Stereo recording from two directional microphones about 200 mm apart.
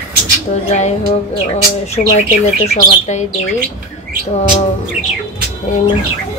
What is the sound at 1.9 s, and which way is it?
Speech, 35° left (ahead or behind).